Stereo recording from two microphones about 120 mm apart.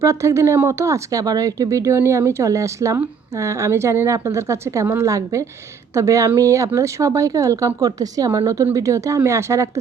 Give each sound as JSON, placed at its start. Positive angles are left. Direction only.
{"t": 0.0, "sound": "speech", "side_deg": -25}